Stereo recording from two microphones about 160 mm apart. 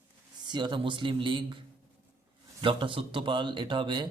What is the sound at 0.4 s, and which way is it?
Speech, 30° right (ahead or behind).